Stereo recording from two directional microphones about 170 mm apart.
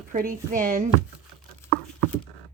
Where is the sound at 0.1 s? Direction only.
55° right (ahead or behind).